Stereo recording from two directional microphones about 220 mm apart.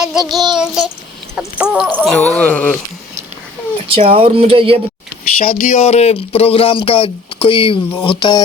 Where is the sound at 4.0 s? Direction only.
25° right (ahead or behind).